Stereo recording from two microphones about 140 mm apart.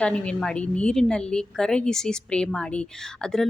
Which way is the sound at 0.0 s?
5° left (ahead or behind).